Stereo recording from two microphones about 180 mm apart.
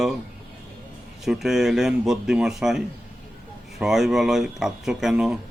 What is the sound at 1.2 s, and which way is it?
Speech, centre (ahead or behind).